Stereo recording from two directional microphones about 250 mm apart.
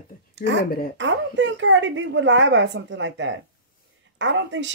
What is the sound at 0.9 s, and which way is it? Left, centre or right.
Speech, right.